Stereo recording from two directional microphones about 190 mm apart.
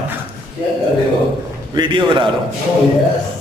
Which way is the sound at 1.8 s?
25° right (ahead or behind).